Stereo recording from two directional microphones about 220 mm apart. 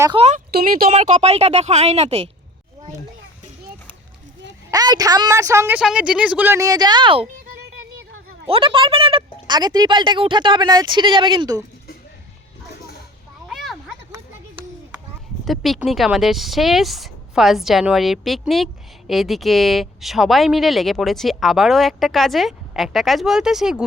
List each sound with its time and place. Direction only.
0.0 s speech: 20° right (ahead or behind)
0.3 s speech: 35° right (ahead or behind)
4.7 s a woman's voice: 15° right (ahead or behind)
8.4 s speech: 25° right (ahead or behind)
13.5 s a sound: centre (ahead or behind)
14.1 s a sound: 15° right (ahead or behind)
15.4 s speech: centre (ahead or behind)